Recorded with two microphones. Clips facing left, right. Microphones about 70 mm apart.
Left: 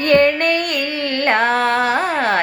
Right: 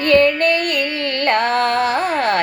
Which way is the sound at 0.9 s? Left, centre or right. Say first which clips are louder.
Even; left.